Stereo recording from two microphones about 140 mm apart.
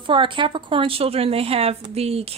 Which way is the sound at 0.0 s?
35° right (ahead or behind).